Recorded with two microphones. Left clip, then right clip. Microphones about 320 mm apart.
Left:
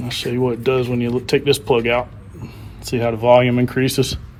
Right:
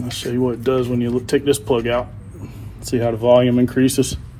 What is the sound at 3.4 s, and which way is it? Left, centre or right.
Speech, left.